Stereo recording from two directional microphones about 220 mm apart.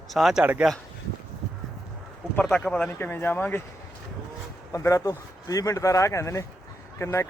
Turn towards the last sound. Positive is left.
turn(degrees=10)  # may be behind; listen again after turning